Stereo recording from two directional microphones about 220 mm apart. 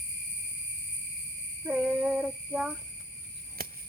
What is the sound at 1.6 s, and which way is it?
Child singing, 5° right (ahead or behind).